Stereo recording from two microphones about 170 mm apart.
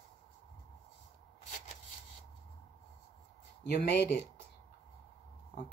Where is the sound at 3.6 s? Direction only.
75° left (ahead or behind).